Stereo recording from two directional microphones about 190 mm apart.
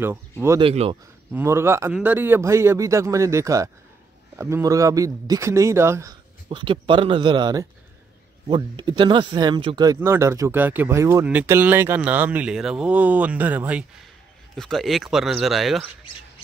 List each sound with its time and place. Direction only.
0.6 s speech: 30° right (ahead or behind)
1.3 s speech: 15° right (ahead or behind)
6.5 s speech: 25° right (ahead or behind); by 15.9 s centre (ahead or behind)